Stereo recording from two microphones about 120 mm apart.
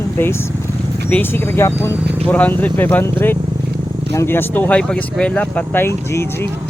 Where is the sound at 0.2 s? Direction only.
20° left (ahead or behind).